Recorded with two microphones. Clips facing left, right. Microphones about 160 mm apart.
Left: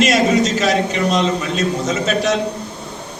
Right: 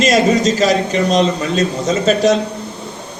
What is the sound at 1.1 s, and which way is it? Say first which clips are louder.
Speech: right 3 dB; 40° right (ahead or behind).